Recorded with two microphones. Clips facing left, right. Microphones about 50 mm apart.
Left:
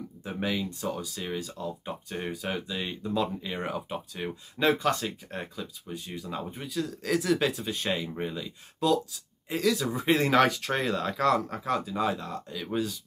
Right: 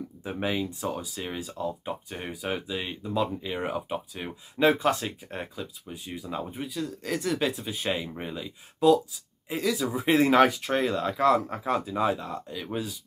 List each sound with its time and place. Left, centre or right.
0.2 s speech: right
4.6 s speech: right; by 11.3 s centre
11.3 s speech: right